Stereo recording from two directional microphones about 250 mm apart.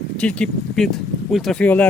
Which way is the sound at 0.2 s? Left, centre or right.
Centre.